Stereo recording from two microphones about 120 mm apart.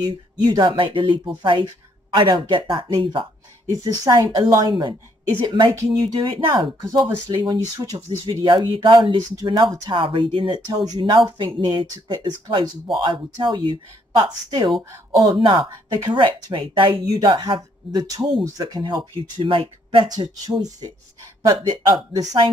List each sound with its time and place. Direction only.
0.0 s speech: 35° right (ahead or behind)
17.6 s speech: 30° right (ahead or behind); by 20.1 s 45° right (ahead or behind)
20.2 s speech: 35° right (ahead or behind)